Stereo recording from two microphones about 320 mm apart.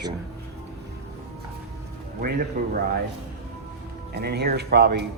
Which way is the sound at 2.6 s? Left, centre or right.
Right.